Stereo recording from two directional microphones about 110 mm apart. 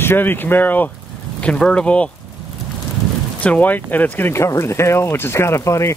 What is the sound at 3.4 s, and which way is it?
Speech, 15° left (ahead or behind).